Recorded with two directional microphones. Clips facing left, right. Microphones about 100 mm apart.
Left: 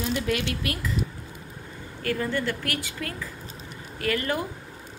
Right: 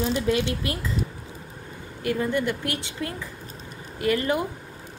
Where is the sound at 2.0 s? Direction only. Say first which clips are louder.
Right 3 dB; 20° right (ahead or behind).